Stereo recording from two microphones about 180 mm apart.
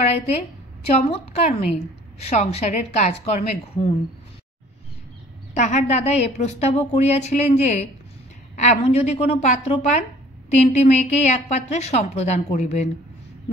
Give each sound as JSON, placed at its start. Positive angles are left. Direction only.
{"t": 0.9, "sound": "a woman's voice", "side_deg": 40}
{"t": 5.5, "sound": "a woman's voice", "side_deg": 40}